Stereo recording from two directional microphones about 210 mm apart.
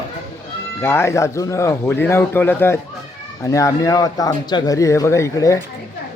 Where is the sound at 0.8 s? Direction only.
10° left (ahead or behind).